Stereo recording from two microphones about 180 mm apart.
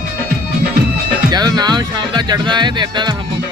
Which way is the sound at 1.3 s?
20° right (ahead or behind).